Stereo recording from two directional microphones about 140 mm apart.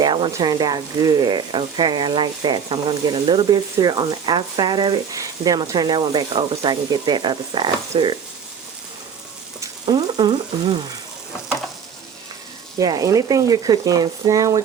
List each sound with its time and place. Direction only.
0.0 s sizzle: 35° right (ahead or behind)
9.8 s sizzle: 30° right (ahead or behind)
12.8 s speech: 25° right (ahead or behind)